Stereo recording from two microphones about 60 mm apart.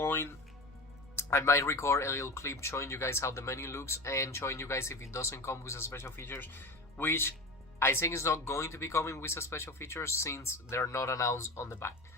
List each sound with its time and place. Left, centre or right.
0.0 s music: left
1.1 s speech: left